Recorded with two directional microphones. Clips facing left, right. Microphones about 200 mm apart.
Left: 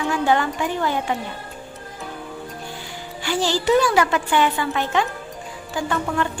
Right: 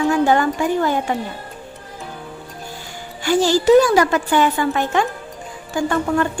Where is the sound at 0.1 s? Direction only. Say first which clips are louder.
Right 4 dB; 45° right (ahead or behind).